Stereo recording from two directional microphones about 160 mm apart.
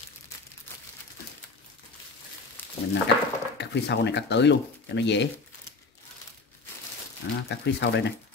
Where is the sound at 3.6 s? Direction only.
90° left.